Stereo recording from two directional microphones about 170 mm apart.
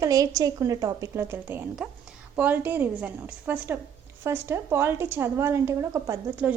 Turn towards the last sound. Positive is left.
turn(degrees=-15)  # may be behind; listen again after turning